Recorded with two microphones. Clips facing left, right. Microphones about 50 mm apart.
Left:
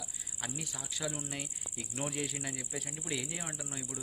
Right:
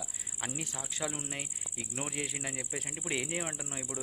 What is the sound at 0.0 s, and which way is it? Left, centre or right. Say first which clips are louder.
A man's voice: right 3 dB; right.